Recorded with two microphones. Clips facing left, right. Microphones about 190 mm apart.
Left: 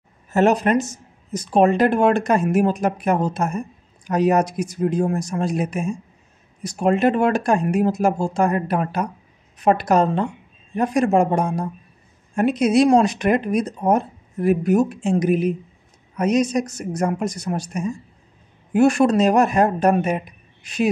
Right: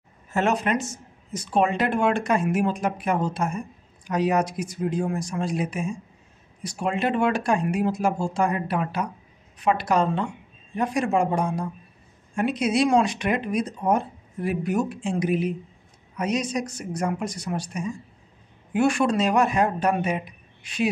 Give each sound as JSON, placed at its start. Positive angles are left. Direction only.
{"t": 0.3, "sound": "speech", "side_deg": 40}